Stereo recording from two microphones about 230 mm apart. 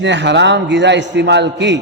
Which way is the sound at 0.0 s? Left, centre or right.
Right.